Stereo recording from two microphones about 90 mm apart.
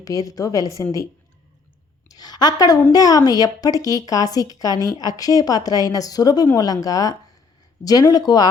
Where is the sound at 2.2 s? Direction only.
50° left (ahead or behind).